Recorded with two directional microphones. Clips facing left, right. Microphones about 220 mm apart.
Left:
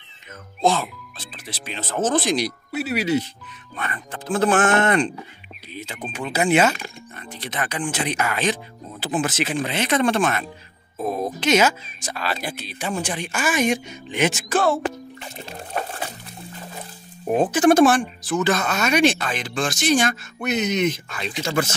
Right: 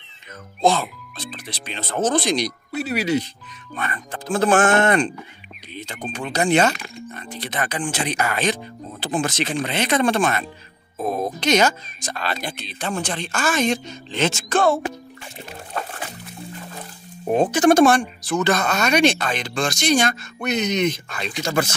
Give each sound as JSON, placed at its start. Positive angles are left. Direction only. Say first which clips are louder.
{"t": 0.6, "sound": "speech", "louder": "right 1 dB", "side_deg": 0}
{"t": 4.1, "sound": "speech", "louder": "right 1 dB", "side_deg": -40}
{"t": 5.8, "sound": "speech", "louder": "right 1 dB", "side_deg": 5}
{"t": 7.3, "sound": "speech", "louder": "right 1 dB", "side_deg": -35}
{"t": 9.0, "sound": "speech", "louder": "even", "side_deg": 5}
{"t": 9.8, "sound": "speech", "louder": "right 1 dB", "side_deg": -35}
{"t": 11.3, "sound": "speech", "louder": "left 1 dB", "side_deg": 5}
{"t": 17.3, "sound": "speech", "louder": "right 1 dB", "side_deg": 5}
{"t": 21.1, "sound": "speech", "louder": "right 1 dB", "side_deg": -45}